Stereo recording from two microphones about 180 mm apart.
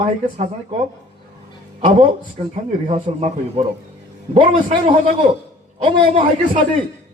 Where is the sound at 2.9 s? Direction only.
35° right (ahead or behind).